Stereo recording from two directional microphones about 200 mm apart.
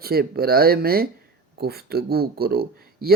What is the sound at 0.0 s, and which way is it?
Speech, 50° right (ahead or behind).